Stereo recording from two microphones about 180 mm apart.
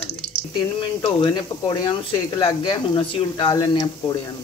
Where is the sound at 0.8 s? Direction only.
30° left (ahead or behind).